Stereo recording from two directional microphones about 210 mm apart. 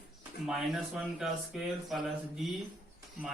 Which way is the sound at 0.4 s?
Centre (ahead or behind).